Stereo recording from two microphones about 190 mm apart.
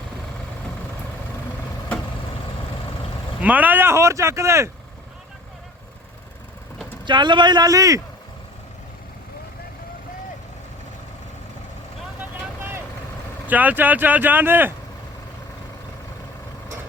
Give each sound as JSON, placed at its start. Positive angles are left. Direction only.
{"t": 3.4, "sound": "speech", "side_deg": -10}
{"t": 7.0, "sound": "speech", "side_deg": -25}
{"t": 12.2, "sound": "vehicle", "side_deg": -10}
{"t": 13.5, "sound": "speech", "side_deg": -10}